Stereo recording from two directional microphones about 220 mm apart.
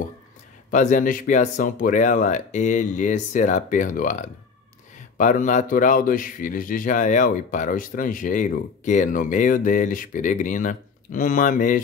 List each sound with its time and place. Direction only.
0.7 s speech: 35° left (ahead or behind)